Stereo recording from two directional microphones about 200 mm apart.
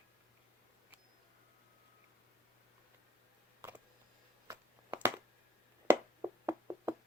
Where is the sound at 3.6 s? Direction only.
10° right (ahead or behind).